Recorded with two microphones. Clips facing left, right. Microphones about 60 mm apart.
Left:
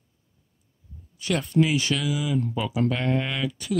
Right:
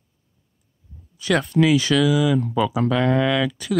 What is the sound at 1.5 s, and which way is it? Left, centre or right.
Speech, right.